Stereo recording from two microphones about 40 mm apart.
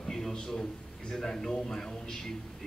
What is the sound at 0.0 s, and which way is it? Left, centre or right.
A man's voice, centre.